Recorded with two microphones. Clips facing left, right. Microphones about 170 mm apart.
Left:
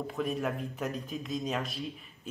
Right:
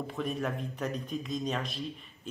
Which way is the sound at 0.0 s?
Centre (ahead or behind).